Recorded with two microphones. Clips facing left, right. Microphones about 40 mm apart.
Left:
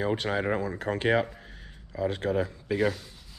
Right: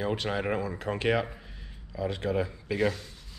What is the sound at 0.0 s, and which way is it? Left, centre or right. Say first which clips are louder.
Speech: left 2 dB; left.